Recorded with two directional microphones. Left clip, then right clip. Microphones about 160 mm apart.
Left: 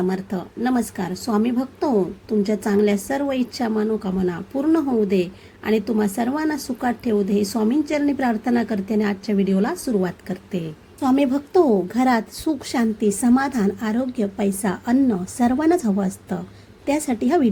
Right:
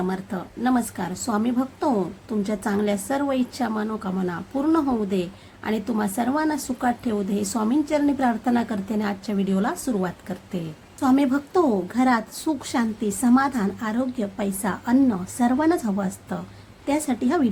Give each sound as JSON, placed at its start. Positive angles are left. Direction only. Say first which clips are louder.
{"t": 0.1, "sound": "a woman's voice", "louder": "left 3 dB", "side_deg": 10}